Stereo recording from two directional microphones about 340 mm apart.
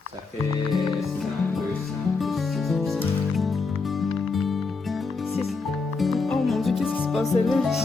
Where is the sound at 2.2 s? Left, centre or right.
Centre.